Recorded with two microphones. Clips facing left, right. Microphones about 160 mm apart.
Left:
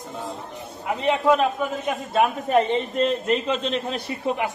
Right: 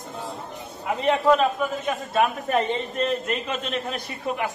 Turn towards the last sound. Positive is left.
turn(degrees=25)  # may be behind; listen again after turning